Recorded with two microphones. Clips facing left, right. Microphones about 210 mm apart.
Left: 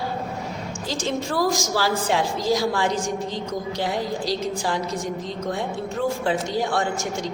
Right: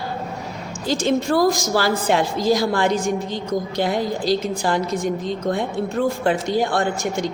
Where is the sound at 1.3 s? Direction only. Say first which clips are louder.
Right 3 dB; 60° right (ahead or behind).